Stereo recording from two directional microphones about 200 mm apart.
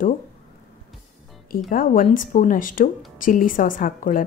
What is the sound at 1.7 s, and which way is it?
Speech, 45° left (ahead or behind).